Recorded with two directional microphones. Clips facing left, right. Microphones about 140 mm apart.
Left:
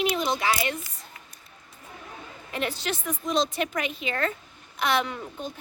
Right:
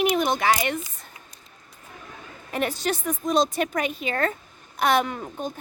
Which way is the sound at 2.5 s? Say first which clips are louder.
Right 4 dB; 50° right (ahead or behind).